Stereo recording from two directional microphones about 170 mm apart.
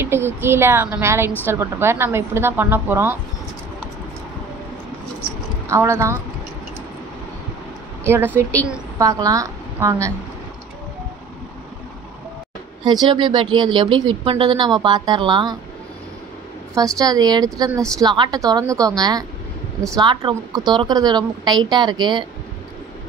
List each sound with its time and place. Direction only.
0.0 s a woman's voice: 15° right (ahead or behind)
5.7 s a woman's voice: 15° right (ahead or behind)
8.0 s a woman's voice: 15° right (ahead or behind)
12.8 s a woman's voice: 25° right (ahead or behind)
17.0 s a woman's voice: 20° right (ahead or behind)